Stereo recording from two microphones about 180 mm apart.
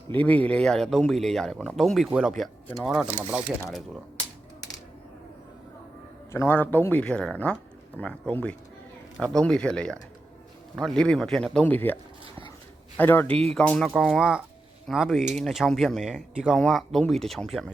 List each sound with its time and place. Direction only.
0.1 s speech: 10° left (ahead or behind)
6.3 s speech: 15° left (ahead or behind)
13.0 s speech: 10° left (ahead or behind)